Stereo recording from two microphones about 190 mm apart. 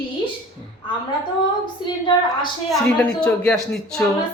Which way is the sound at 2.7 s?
5° left (ahead or behind).